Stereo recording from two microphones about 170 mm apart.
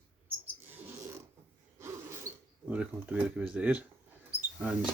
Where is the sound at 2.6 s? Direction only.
10° right (ahead or behind).